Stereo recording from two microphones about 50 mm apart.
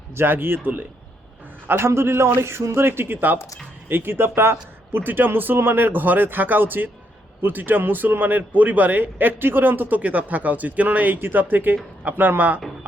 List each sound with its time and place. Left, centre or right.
0.2 s a man's voice: right
5.0 s a man's voice: right
10.0 s a man's voice: right